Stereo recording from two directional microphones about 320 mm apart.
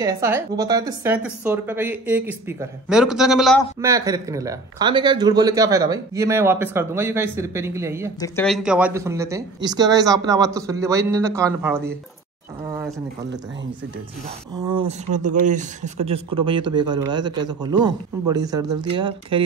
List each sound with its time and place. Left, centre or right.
0.0 s speech: centre
8.2 s speech: centre
12.6 s a sound: centre
14.7 s speech: centre